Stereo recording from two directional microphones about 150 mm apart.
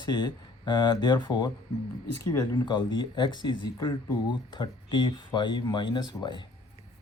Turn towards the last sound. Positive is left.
turn(degrees=30)  # may be behind; listen again after turning